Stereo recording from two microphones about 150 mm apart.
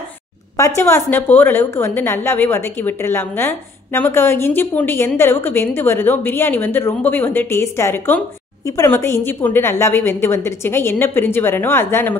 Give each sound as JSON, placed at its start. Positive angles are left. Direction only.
{"t": 0.6, "sound": "a woman's voice", "side_deg": 20}